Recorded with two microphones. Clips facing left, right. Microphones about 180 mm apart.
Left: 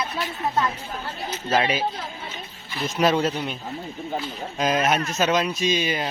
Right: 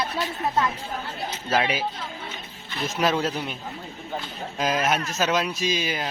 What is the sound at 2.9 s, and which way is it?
Speech, centre (ahead or behind).